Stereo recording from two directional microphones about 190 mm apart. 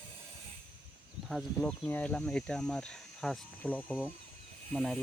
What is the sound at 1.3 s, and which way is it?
Speech, centre (ahead or behind).